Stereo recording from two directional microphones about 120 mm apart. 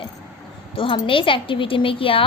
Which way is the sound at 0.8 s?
50° left (ahead or behind).